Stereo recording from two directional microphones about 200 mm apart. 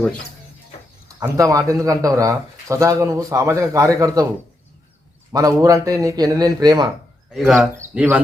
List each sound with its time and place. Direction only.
1.0 s speech: 15° right (ahead or behind)
5.3 s speech: 15° right (ahead or behind)
7.3 s speech: centre (ahead or behind)